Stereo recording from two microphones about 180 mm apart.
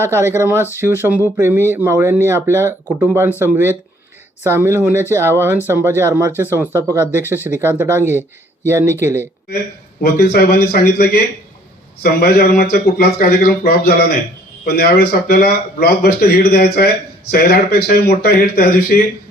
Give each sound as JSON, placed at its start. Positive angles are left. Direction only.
{"t": 0.0, "sound": "speech", "side_deg": -15}
{"t": 10.0, "sound": "a man's voice", "side_deg": 60}